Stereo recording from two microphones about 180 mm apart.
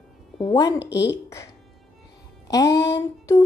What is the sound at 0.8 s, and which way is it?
Speech, 70° left (ahead or behind).